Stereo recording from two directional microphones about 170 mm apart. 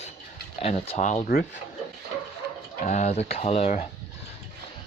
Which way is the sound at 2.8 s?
45° left (ahead or behind).